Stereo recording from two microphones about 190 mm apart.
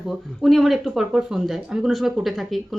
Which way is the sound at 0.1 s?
Centre (ahead or behind).